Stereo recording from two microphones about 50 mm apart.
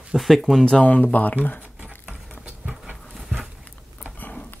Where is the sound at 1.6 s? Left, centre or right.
Right.